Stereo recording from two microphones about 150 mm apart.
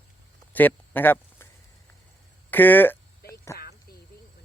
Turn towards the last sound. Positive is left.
turn(degrees=20)  # may be behind; listen again after turning